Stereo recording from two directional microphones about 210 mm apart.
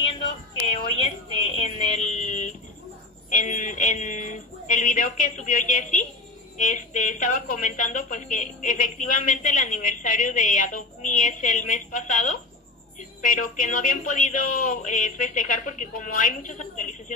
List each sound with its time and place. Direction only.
0.7 s a woman's voice: 30° left (ahead or behind)
3.3 s a sound: 40° left (ahead or behind)
6.6 s a woman's voice: 40° left (ahead or behind)